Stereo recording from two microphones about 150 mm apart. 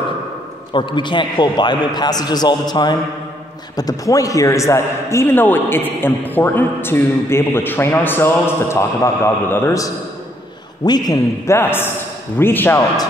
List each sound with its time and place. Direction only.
0.7 s a man's voice: 30° left (ahead or behind); by 12.8 s 15° left (ahead or behind)